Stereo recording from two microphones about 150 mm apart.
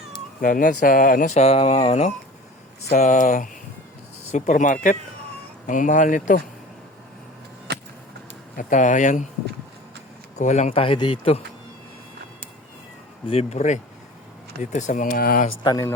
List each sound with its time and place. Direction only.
0.4 s speech: 60° left (ahead or behind)
7.7 s a sound: 90° right
8.5 s speech: 55° left (ahead or behind)
10.3 s speech: 50° left (ahead or behind)
13.2 s speech: 45° left (ahead or behind); by 15.5 s 70° left (ahead or behind)
15.6 s speech: 25° left (ahead or behind)